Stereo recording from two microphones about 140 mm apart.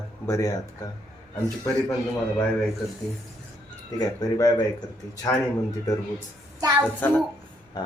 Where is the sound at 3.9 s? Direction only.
25° left (ahead or behind).